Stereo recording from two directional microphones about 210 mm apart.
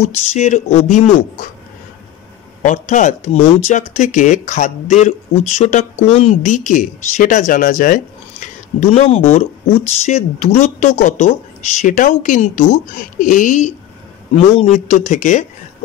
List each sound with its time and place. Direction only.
0.0 s speech: 35° left (ahead or behind)
2.6 s speech: 35° left (ahead or behind)